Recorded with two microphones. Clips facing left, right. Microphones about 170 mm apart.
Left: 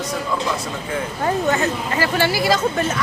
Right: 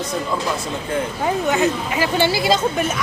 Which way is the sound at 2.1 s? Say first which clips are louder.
Right 1 dB; 25° right (ahead or behind).